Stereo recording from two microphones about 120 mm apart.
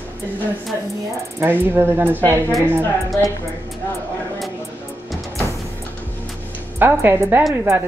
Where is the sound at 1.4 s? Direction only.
15° right (ahead or behind).